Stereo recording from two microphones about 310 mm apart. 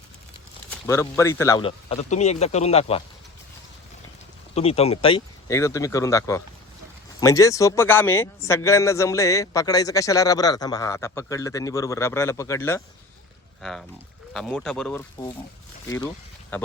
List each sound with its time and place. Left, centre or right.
0.9 s a man's voice: centre
4.5 s speech: centre